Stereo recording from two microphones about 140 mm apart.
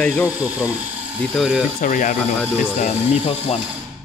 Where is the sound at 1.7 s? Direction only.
70° left (ahead or behind).